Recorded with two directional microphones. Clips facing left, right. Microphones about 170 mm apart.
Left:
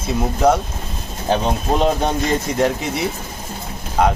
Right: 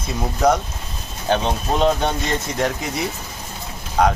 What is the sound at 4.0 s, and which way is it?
Speech, 5° left (ahead or behind).